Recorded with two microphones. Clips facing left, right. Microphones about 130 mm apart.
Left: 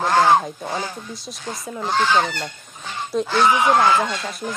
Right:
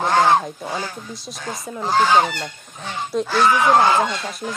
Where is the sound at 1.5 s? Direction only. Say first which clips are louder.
Right 2 dB; 5° right (ahead or behind).